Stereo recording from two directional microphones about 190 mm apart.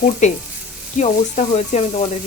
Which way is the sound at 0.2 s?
40° left (ahead or behind).